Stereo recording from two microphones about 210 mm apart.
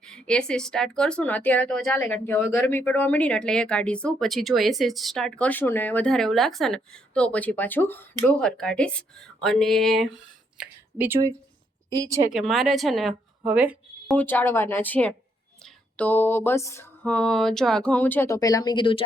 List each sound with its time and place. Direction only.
0.0 s a woman's voice: 5° left (ahead or behind); by 12.2 s 15° right (ahead or behind)
12.3 s speech: centre (ahead or behind)
14.2 s a sound: 10° left (ahead or behind)